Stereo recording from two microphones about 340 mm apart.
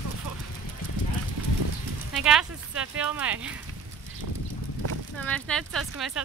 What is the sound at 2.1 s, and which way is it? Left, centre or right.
Speech, centre.